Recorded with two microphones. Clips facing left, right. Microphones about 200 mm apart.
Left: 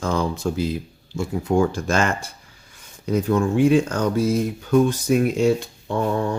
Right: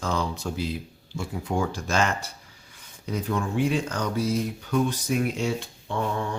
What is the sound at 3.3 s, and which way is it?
Speech, 45° left (ahead or behind).